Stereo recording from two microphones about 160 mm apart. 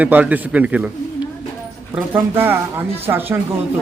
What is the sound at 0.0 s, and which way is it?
Speech, 10° right (ahead or behind).